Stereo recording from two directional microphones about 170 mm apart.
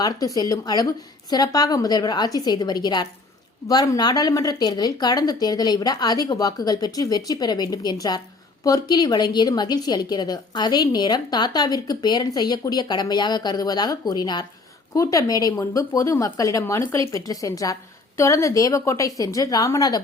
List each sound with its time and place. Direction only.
0.0 s a woman's voice: 20° left (ahead or behind)